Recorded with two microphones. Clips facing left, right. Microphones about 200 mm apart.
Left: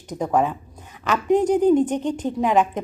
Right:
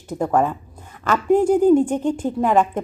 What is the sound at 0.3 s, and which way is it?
Speech, 10° left (ahead or behind).